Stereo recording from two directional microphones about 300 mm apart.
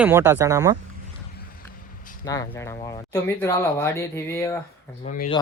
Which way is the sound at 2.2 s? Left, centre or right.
Centre.